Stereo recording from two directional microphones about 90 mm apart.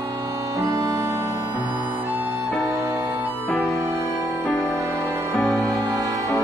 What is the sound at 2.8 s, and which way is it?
Music, 25° right (ahead or behind).